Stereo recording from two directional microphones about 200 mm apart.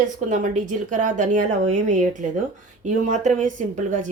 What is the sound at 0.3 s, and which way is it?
A woman's voice, 40° right (ahead or behind).